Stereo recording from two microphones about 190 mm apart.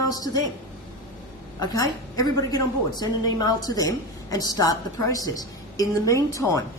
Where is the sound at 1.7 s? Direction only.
20° left (ahead or behind).